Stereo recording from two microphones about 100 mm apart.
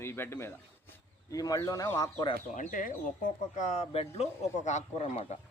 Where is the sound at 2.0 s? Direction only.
50° left (ahead or behind).